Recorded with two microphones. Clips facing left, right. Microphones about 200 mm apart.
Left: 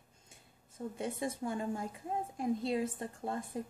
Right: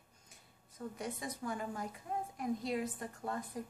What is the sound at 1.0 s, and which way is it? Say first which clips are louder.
A woman's voice: left 6 dB; 25° left (ahead or behind).